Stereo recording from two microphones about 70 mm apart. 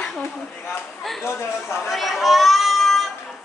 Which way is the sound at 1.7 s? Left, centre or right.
Centre.